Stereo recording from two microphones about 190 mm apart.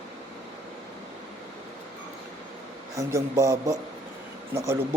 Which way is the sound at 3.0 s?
15° right (ahead or behind).